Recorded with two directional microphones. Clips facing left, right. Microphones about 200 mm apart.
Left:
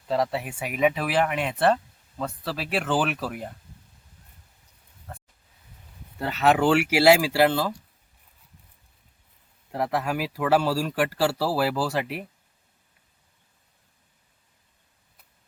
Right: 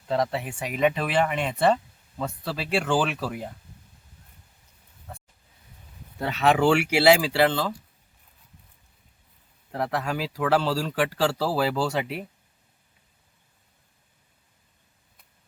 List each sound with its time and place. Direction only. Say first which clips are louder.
0.1 s speech: even; centre (ahead or behind)
5.1 s a sound: even; centre (ahead or behind)
6.1 s speech: even; 5° left (ahead or behind)
9.7 s speech: left 1 dB; 5° left (ahead or behind)